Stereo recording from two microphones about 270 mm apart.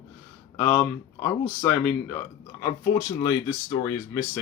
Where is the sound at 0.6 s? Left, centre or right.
Centre.